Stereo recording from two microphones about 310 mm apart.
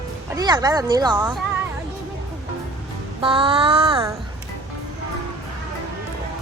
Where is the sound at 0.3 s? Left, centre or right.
Centre.